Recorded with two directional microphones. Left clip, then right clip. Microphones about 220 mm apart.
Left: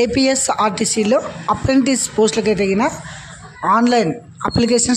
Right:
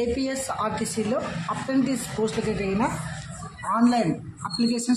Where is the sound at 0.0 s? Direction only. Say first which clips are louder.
Left 11 dB; 40° left (ahead or behind).